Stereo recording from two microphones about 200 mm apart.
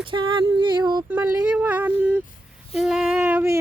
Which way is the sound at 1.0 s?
10° right (ahead or behind).